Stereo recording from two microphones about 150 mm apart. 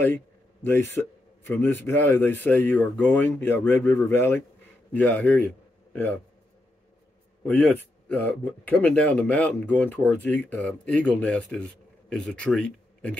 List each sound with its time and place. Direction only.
0.7 s speech: 15° left (ahead or behind)
7.4 s speech: 10° left (ahead or behind)